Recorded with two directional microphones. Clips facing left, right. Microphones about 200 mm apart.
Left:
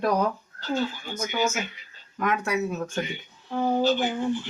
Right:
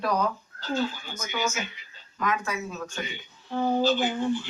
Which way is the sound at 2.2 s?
65° left (ahead or behind).